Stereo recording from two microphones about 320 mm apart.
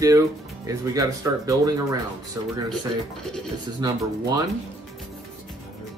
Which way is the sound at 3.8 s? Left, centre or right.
Centre.